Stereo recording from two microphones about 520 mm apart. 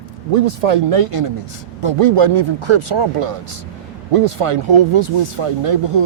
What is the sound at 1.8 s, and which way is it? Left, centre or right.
Speech, right.